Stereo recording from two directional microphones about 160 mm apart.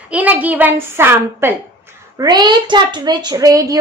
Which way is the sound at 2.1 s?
25° right (ahead or behind).